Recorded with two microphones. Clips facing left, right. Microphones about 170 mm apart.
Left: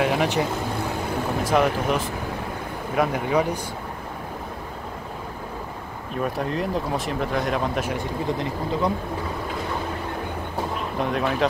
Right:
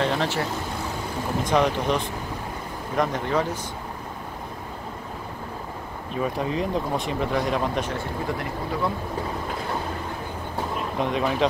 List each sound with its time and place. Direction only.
0.0 s speech: 10° left (ahead or behind)
1.4 s speech: 5° left (ahead or behind)
6.2 s speech: centre (ahead or behind)
7.9 s speech: 20° left (ahead or behind)
11.0 s speech: centre (ahead or behind)